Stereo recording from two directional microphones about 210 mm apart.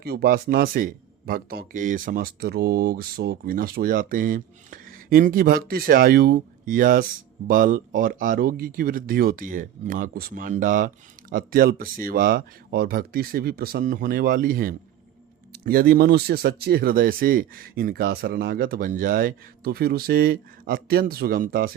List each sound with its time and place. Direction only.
0.0 s speech: 50° right (ahead or behind)